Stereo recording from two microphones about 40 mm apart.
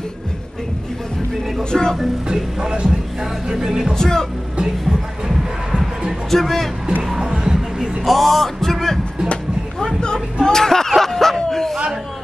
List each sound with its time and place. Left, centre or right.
1.6 s speech: centre
2.2 s speech: centre
3.9 s speech: centre
6.3 s speech: centre
7.2 s music: centre
8.0 s speech: centre
9.9 s a sound: left